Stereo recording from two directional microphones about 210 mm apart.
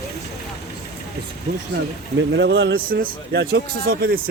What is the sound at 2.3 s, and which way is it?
Speech, 60° right (ahead or behind).